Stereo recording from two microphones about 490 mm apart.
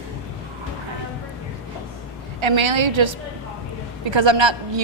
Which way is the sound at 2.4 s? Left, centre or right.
Right.